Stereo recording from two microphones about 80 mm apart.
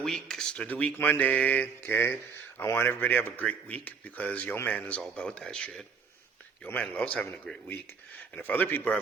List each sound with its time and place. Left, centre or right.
0.0 s speech: centre
6.8 s speech: centre
8.4 s speech: left